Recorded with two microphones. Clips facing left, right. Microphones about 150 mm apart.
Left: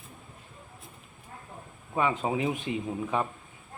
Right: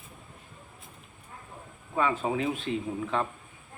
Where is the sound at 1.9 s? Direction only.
20° left (ahead or behind).